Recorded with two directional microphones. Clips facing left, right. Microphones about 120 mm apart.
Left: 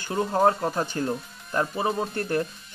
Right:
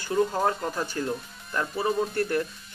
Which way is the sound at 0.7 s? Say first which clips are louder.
Left 2 dB; 20° left (ahead or behind).